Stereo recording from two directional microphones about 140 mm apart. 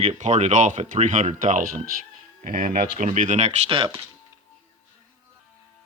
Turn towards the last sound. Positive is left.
turn(degrees=-35)  # may be behind; listen again after turning